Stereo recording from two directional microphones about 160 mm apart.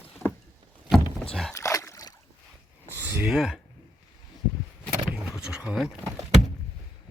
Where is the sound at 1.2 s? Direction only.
5° left (ahead or behind).